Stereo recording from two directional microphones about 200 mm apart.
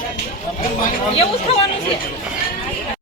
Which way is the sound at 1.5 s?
30° left (ahead or behind).